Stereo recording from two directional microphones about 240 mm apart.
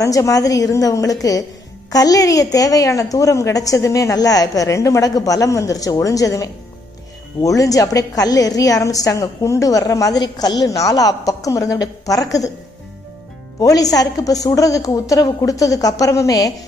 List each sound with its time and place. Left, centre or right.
0.0 s a woman's voice: centre
13.6 s a woman's voice: centre